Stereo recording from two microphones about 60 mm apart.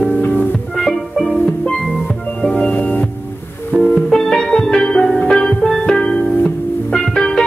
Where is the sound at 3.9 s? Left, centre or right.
Centre.